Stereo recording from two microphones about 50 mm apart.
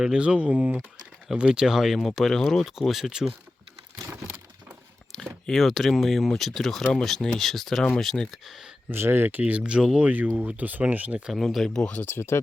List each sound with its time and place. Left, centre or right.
0.0 s speech: centre
5.5 s speech: centre
8.4 s speech: centre
8.9 s speech: right
9.5 s speech: right
10.0 s speech: right
11.3 s speech: centre
12.0 s speech: left